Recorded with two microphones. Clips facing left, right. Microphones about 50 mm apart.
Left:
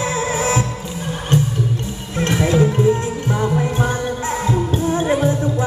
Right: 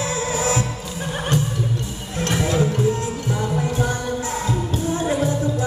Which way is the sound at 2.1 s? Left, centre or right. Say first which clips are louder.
Left 4 dB; left.